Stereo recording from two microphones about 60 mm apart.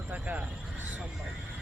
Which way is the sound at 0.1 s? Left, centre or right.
Right.